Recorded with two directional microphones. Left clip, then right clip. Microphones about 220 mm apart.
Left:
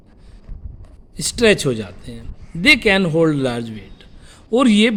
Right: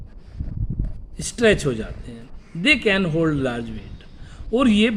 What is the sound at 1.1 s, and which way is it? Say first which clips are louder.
A man's voice: left 3 dB; 40° left (ahead or behind).